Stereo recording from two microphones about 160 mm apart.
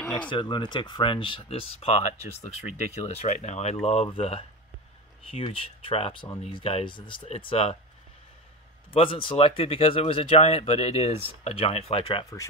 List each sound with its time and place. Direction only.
0.3 s speech: 30° left (ahead or behind)
8.9 s speech: 35° left (ahead or behind)